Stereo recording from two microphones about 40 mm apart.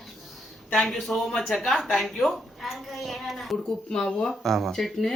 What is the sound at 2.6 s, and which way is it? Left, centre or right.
Speech, centre.